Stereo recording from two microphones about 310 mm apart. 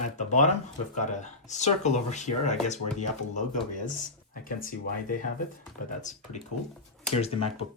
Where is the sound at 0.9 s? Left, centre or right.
Left.